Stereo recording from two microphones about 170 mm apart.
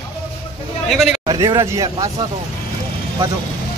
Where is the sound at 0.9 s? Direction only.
Centre (ahead or behind).